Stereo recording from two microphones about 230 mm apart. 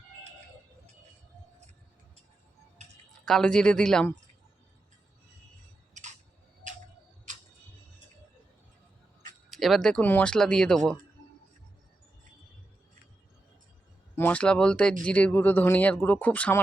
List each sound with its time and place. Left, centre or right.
3.1 s speech: centre
5.9 s camera: right
9.5 s speech: centre
14.2 s speech: centre